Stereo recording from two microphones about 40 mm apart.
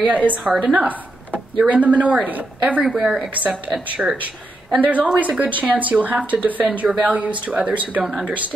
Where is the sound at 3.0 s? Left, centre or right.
Right.